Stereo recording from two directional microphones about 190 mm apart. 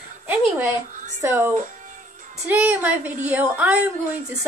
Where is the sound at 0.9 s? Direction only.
40° right (ahead or behind).